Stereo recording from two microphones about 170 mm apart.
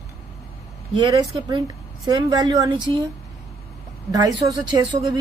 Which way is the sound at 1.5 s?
25° right (ahead or behind).